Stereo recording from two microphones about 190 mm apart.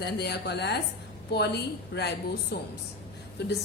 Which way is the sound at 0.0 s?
60° left (ahead or behind).